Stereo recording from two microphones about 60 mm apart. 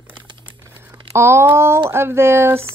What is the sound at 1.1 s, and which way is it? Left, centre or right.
Speech, right.